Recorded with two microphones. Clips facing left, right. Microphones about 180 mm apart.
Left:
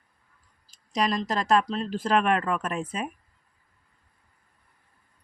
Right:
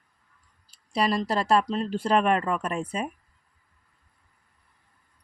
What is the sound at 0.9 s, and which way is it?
Speech, 10° right (ahead or behind).